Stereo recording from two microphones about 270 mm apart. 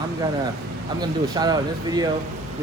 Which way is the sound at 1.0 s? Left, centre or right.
Centre.